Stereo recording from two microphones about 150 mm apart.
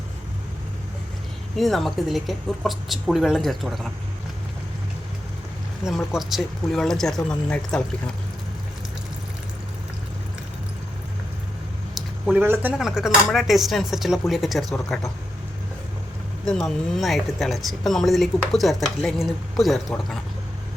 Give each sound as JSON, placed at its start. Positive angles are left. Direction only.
{"t": 1.5, "sound": "speech", "side_deg": 0}
{"t": 5.8, "sound": "speech", "side_deg": 0}
{"t": 11.9, "sound": "a sound", "side_deg": -5}
{"t": 12.4, "sound": "speech", "side_deg": -15}
{"t": 12.8, "sound": "speech", "side_deg": -5}
{"t": 16.5, "sound": "speech", "side_deg": 0}